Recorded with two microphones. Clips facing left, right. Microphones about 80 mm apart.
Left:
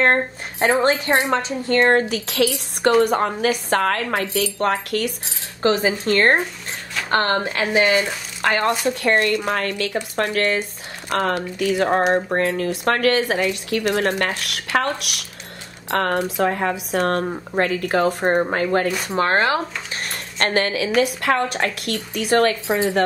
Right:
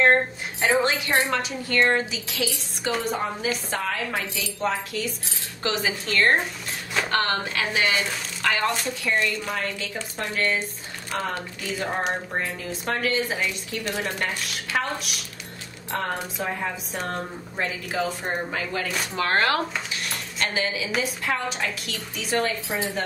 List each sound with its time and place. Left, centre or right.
0.0 s speech: left
1.3 s speech: left
1.9 s speech: left
5.6 s speech: left
9.0 s speech: left
12.1 s speech: left
19.1 s speech: left
20.0 s speech: left